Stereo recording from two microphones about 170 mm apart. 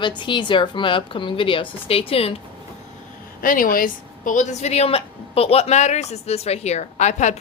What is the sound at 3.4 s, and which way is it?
A woman's voice, 55° left (ahead or behind).